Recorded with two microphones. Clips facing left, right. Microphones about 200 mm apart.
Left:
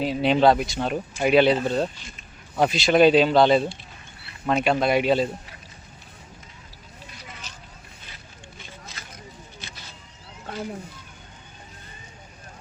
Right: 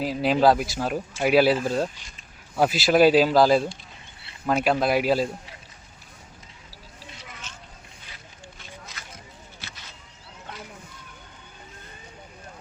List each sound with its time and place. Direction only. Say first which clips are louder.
0.0 s speech: left 1 dB; centre (ahead or behind)
7.5 s vehicle: even; 35° left (ahead or behind)